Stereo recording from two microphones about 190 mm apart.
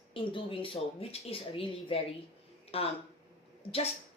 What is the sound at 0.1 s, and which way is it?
A woman's voice, 25° left (ahead or behind).